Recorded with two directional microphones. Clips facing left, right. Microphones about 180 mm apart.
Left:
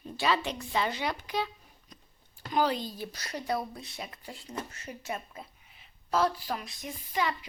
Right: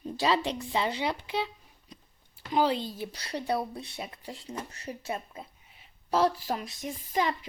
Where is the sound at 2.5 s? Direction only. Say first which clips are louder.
Right 2 dB; 25° right (ahead or behind).